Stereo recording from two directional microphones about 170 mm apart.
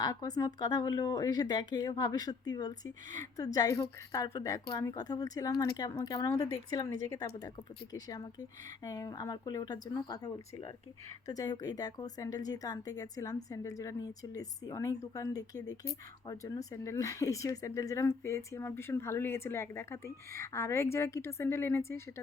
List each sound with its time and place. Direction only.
0.0 s speech: 20° left (ahead or behind)